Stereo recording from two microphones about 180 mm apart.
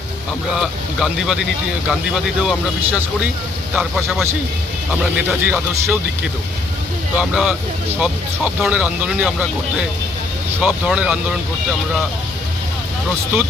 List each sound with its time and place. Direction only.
0.5 s speech: 5° right (ahead or behind)
7.2 s speech: 5° right (ahead or behind)
8.6 s speech: 10° right (ahead or behind)
10.6 s speech: 5° right (ahead or behind)